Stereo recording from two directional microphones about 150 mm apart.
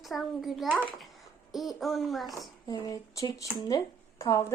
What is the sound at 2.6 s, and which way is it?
Speech, 25° left (ahead or behind).